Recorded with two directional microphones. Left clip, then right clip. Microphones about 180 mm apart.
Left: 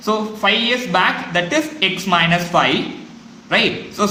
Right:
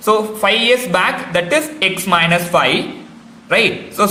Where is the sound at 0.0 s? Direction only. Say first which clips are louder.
Right 4 dB; 35° right (ahead or behind).